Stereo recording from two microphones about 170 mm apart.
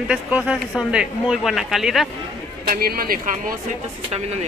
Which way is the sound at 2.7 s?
60° right (ahead or behind).